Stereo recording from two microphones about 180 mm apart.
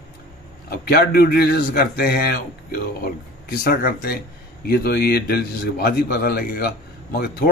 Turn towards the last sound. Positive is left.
turn(degrees=60)  # may be behind; listen again after turning